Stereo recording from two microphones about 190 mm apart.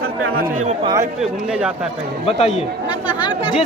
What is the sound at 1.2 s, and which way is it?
Speech, 5° right (ahead or behind).